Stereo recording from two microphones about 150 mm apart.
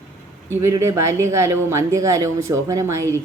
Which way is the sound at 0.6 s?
20° right (ahead or behind).